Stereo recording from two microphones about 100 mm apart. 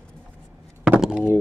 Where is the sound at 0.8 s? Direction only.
5° right (ahead or behind).